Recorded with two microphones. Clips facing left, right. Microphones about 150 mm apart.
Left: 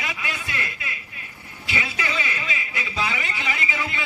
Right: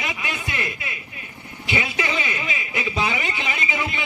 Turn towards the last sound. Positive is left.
turn(degrees=-20)  # may be behind; listen again after turning